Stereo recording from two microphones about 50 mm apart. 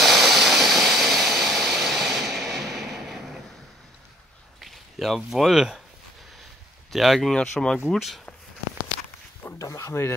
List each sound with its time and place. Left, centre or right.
0.0 s vehicle: centre
4.6 s speech: centre
6.9 s speech: centre
7.2 s speech: centre
9.4 s a sound: left
9.8 s speech: left